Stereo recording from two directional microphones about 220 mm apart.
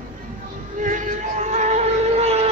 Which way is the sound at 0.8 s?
35° right (ahead or behind).